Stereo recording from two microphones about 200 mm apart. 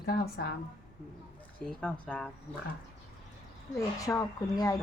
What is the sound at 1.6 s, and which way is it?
Speech, 5° left (ahead or behind).